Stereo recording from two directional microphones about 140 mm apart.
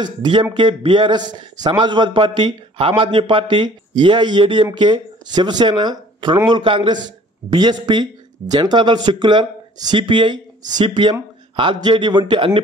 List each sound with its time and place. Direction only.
0.0 s a man's voice: 35° right (ahead or behind)